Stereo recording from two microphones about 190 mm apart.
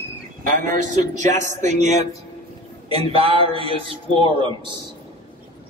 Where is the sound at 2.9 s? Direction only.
30° right (ahead or behind).